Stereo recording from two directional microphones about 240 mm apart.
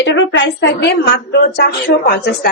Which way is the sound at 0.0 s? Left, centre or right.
Left.